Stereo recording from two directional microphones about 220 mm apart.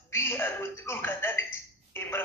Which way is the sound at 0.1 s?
10° left (ahead or behind).